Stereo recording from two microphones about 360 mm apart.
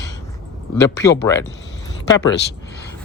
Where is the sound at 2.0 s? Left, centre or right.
Left.